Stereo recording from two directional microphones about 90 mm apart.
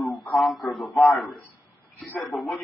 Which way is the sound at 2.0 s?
20° left (ahead or behind).